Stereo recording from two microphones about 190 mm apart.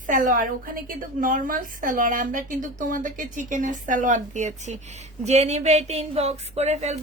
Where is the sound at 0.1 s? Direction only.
45° right (ahead or behind).